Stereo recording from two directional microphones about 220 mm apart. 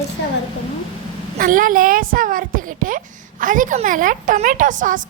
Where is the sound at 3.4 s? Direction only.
35° right (ahead or behind).